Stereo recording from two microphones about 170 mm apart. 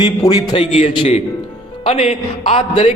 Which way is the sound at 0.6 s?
40° left (ahead or behind).